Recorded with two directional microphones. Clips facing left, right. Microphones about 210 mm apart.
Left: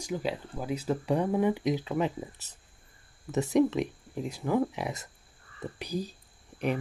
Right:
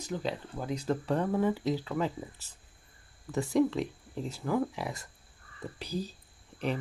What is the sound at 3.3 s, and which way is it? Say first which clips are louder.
Speech: left 2 dB; 20° left (ahead or behind).